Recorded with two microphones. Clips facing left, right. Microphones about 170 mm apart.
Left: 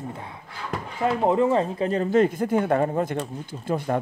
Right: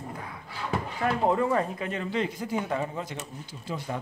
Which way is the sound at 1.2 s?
20° left (ahead or behind).